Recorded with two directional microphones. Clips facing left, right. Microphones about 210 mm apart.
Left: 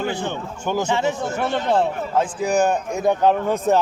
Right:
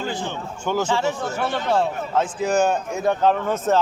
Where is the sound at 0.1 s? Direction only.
60° left (ahead or behind).